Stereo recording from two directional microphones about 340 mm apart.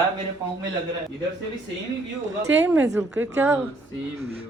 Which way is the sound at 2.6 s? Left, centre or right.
Centre.